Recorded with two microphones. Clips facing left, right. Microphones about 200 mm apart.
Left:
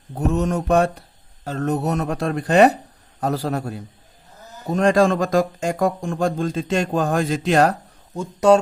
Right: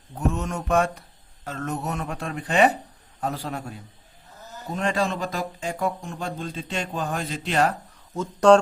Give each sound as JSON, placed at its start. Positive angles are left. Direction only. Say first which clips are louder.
{"t": 0.1, "sound": "speech", "louder": "left 6 dB", "side_deg": 40}
{"t": 8.1, "sound": "speech", "louder": "left 1 dB", "side_deg": 10}